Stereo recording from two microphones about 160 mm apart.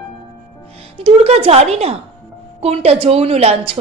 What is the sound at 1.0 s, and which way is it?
A woman's voice, 40° right (ahead or behind).